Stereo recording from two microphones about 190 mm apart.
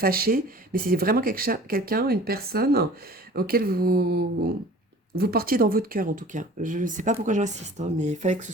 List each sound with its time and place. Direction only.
0.0 s speech: 50° right (ahead or behind)